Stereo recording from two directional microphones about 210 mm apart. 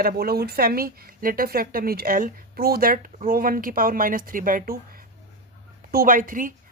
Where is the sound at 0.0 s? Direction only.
45° right (ahead or behind).